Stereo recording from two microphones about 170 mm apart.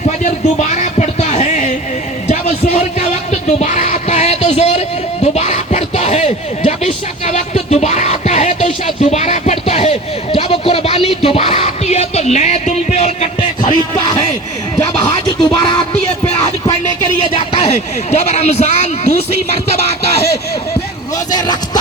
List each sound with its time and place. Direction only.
0.6 s music: 45° left (ahead or behind)
2.2 s a sound: 40° left (ahead or behind)
3.4 s music: 45° left (ahead or behind)
14.9 s music: 30° left (ahead or behind)
17.3 s speech: 35° left (ahead or behind)
21.2 s a sound: 25° left (ahead or behind)